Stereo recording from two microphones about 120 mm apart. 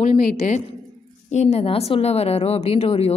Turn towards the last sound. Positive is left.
turn(degrees=60)  # may be behind; listen again after turning